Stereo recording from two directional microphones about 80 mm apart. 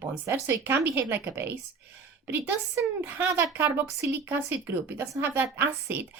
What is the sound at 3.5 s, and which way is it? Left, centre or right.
A woman's voice, right.